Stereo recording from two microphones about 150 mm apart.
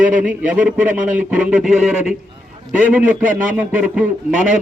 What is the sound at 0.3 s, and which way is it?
Speech, 10° right (ahead or behind).